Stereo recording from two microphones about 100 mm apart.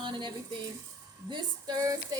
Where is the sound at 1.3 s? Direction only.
40° right (ahead or behind).